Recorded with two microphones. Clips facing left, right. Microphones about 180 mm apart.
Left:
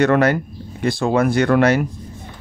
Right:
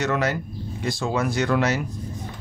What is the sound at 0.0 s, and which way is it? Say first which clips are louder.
Speech: left 9 dB; 60° left (ahead or behind).